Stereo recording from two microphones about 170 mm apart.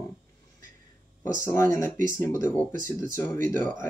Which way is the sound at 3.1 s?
15° left (ahead or behind).